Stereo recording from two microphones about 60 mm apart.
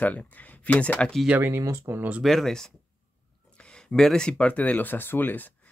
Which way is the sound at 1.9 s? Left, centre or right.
Right.